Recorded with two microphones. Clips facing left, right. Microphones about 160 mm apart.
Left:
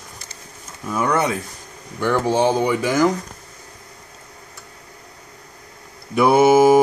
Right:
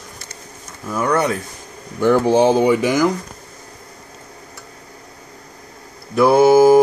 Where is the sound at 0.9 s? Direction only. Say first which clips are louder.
Right 2 dB; 5° left (ahead or behind).